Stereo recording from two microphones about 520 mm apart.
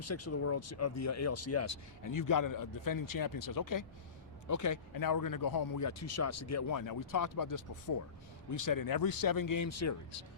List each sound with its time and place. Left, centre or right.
0.0 s speech: left